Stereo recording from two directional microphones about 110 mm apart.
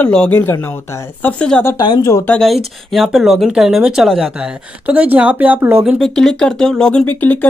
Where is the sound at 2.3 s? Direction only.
5° left (ahead or behind).